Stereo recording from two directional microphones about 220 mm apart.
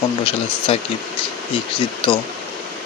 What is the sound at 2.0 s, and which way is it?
Speech, 20° left (ahead or behind).